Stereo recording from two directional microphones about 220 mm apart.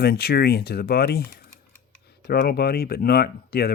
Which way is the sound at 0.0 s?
45° left (ahead or behind).